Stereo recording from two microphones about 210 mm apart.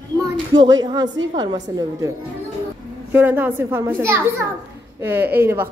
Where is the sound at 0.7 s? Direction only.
20° right (ahead or behind).